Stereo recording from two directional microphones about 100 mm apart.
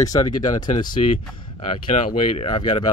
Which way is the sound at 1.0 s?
90° left.